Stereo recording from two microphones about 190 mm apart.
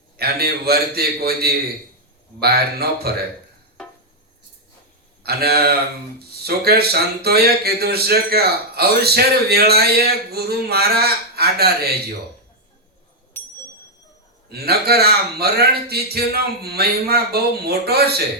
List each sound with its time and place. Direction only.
0.2 s speech: 55° right (ahead or behind)
5.2 s speech: 55° right (ahead or behind)
13.4 s bell: 10° left (ahead or behind)
14.5 s speech: 55° right (ahead or behind)